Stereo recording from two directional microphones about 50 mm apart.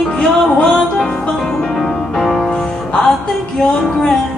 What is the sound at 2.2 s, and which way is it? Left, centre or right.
Music, centre.